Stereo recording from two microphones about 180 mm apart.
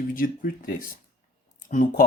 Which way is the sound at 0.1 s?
50° left (ahead or behind).